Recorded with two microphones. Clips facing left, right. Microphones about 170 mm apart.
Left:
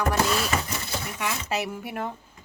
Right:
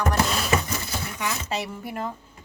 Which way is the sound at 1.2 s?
5° left (ahead or behind).